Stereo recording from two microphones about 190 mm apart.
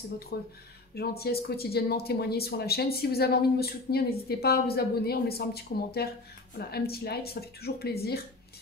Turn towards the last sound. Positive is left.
turn(degrees=55)  # may be behind; listen again after turning